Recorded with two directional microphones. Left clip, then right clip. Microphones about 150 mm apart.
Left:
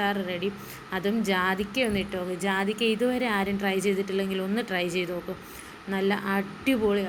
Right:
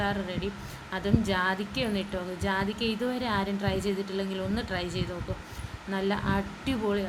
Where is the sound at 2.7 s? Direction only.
45° left (ahead or behind).